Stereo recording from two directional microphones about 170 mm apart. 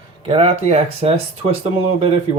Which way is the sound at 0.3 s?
35° right (ahead or behind).